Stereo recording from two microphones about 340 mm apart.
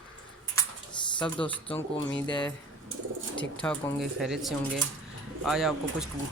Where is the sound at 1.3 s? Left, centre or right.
Centre.